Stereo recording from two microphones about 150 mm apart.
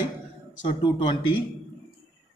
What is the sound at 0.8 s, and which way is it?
Speech, 30° left (ahead or behind).